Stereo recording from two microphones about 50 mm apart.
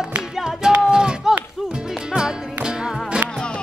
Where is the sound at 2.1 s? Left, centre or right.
Centre.